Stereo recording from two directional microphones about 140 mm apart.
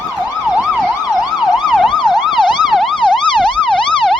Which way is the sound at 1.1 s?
30° left (ahead or behind).